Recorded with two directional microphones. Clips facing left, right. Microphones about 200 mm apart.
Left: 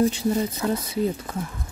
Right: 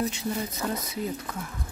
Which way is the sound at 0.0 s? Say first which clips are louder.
Left 8 dB; 30° left (ahead or behind).